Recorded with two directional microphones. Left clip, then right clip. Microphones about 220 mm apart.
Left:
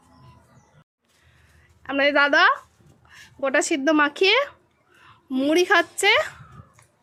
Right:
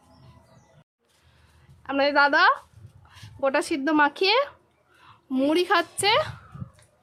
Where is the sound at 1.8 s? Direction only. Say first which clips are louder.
Left 1 dB; centre (ahead or behind).